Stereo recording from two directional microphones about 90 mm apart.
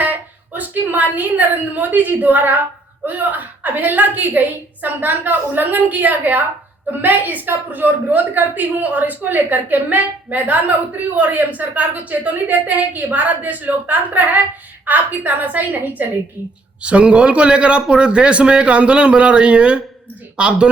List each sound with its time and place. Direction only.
0.0 s a woman's voice: 20° right (ahead or behind)